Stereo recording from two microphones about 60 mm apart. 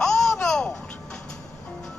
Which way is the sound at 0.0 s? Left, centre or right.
Centre.